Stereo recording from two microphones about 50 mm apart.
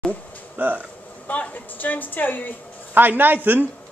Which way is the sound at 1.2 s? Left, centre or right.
Left.